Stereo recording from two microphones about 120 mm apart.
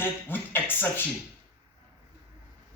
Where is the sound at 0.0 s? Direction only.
15° left (ahead or behind).